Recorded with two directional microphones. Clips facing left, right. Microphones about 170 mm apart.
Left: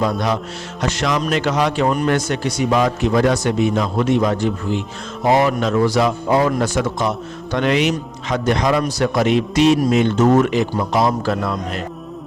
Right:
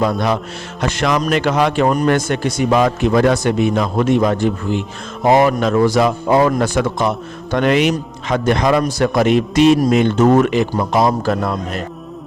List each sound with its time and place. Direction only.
0.0 s speech: 55° right (ahead or behind)